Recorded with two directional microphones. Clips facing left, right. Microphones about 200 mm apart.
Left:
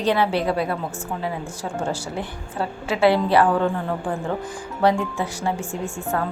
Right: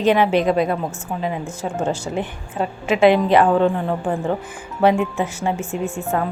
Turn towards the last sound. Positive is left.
turn(degrees=-25)  # may be behind; listen again after turning